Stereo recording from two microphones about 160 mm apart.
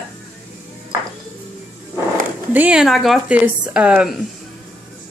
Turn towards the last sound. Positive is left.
turn(degrees=-5)  # may be behind; listen again after turning